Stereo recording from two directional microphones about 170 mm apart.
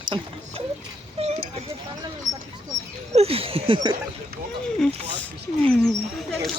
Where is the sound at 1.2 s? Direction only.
35° right (ahead or behind).